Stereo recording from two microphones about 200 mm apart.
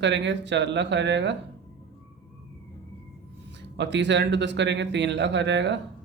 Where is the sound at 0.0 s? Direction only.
60° right (ahead or behind).